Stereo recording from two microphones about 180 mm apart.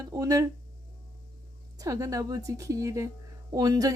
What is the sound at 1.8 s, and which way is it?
Speech, 20° right (ahead or behind).